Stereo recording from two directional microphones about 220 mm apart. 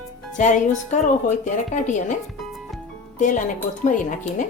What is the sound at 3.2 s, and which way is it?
Speech, 35° left (ahead or behind).